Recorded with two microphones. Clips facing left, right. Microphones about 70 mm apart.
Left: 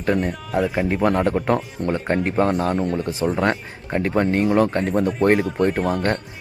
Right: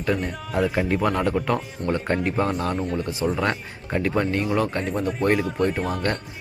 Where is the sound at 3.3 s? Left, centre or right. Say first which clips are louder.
Left 4 dB; left.